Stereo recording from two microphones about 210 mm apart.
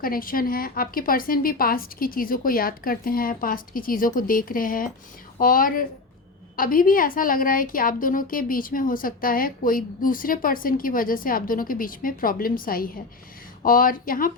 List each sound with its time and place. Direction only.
0.0 s a woman's voice: 45° left (ahead or behind)